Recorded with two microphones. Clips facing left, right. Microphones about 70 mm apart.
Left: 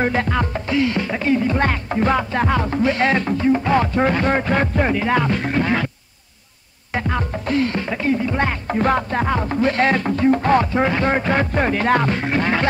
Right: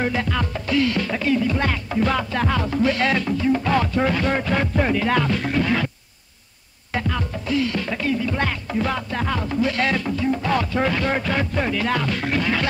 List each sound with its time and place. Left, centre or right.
0.0 s music: left
4.9 s speech: left
5.3 s music: left
6.9 s music: left
7.8 s speech: left
8.6 s music: left